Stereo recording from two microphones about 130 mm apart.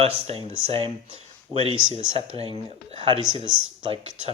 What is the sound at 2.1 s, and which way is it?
Speech, 40° right (ahead or behind).